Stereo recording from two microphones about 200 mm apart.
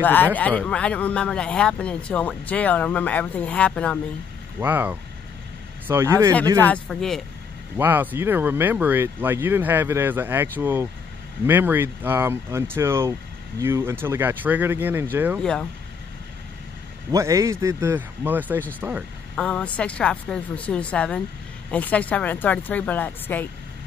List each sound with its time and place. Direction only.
0.0 s speech: 10° left (ahead or behind)
4.6 s speech: 10° right (ahead or behind)
6.6 s a woman's voice: 5° left (ahead or behind)
7.7 s speech: 10° right (ahead or behind)
15.3 s a woman's voice: 5° left (ahead or behind)
17.1 s speech: 15° right (ahead or behind)
19.3 s a woman's voice: 5° left (ahead or behind)